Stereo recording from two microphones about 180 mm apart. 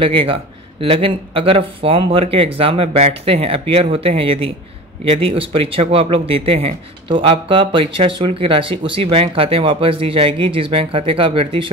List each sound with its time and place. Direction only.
0.0 s speech: 30° right (ahead or behind)